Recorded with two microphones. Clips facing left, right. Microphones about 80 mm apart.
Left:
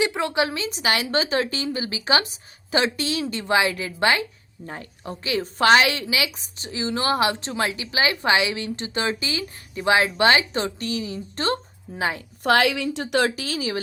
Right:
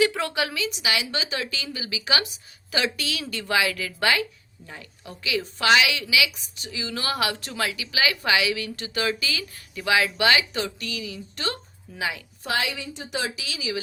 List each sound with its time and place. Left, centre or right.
0.0 s a woman's voice: left
4.6 s a woman's voice: left
12.4 s a woman's voice: left
13.3 s speech: left